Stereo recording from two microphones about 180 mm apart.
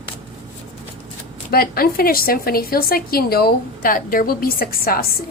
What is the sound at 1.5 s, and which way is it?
A woman's voice, 55° left (ahead or behind).